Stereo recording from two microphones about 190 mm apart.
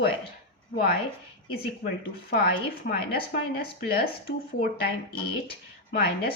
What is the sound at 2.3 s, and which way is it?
Speech, 55° left (ahead or behind).